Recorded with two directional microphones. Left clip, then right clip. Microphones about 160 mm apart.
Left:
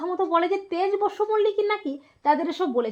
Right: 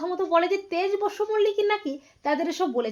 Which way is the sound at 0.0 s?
20° left (ahead or behind).